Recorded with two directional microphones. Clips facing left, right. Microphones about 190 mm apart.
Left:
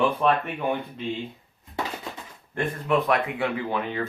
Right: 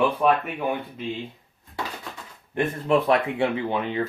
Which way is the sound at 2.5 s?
25° right (ahead or behind).